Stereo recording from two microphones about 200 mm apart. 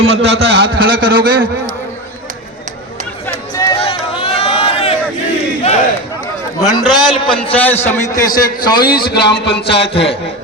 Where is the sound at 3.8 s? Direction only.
30° left (ahead or behind).